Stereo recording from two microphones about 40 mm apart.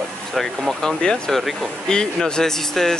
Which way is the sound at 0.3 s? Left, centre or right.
Centre.